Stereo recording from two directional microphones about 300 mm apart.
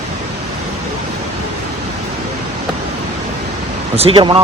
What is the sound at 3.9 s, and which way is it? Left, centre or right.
Speech, centre.